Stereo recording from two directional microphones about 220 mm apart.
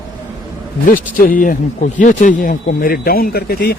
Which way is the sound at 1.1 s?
40° left (ahead or behind).